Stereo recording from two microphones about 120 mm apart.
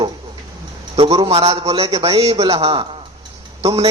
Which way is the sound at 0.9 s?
50° right (ahead or behind).